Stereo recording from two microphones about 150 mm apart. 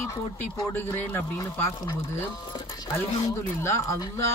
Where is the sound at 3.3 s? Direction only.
20° left (ahead or behind).